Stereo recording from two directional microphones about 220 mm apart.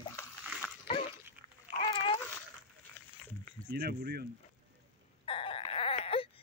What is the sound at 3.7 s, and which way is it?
Speech, 50° right (ahead or behind).